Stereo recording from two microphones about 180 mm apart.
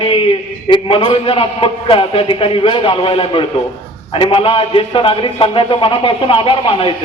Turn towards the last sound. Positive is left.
turn(degrees=30)  # may be behind; listen again after turning